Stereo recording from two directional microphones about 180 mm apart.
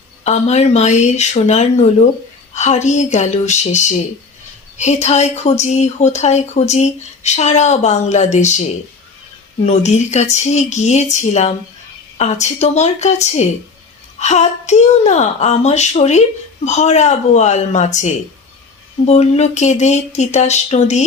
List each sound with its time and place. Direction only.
0.3 s speech: 35° left (ahead or behind)
9.6 s speech: 40° left (ahead or behind)